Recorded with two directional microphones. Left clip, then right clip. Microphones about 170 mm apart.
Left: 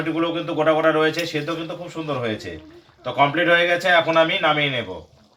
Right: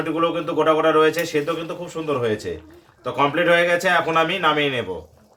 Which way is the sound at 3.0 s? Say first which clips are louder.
Left 1 dB; 35° right (ahead or behind).